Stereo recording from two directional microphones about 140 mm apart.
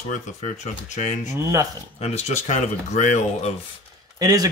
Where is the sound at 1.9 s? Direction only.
50° left (ahead or behind).